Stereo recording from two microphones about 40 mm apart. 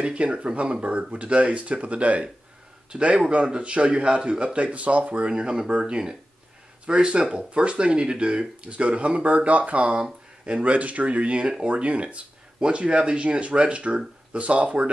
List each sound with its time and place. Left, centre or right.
0.0 s a man's voice: right
5.3 s speech: right